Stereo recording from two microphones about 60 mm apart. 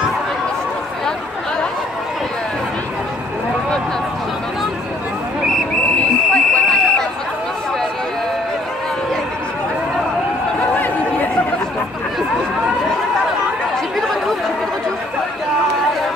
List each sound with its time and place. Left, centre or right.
5.9 s fire alarm: centre
13.9 s chatter: centre